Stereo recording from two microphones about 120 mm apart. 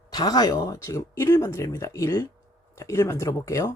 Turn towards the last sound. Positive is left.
turn(degrees=25)  # may be behind; listen again after turning